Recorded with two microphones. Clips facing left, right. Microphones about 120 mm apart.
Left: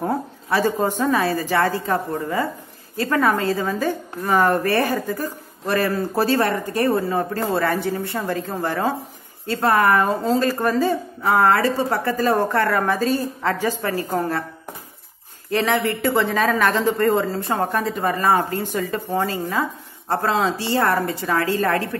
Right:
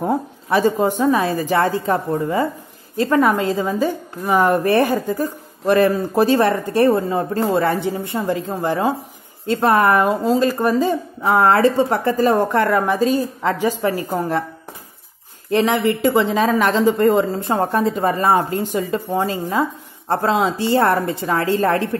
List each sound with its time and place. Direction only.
0.0 s a woman's voice: 15° right (ahead or behind)
10.0 s a woman's voice: 15° right (ahead or behind)
11.3 s a woman's voice: 25° right (ahead or behind)
15.5 s a woman's voice: 15° right (ahead or behind)